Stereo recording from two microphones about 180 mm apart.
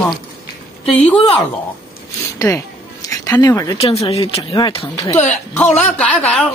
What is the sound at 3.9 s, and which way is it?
Speech, 35° left (ahead or behind).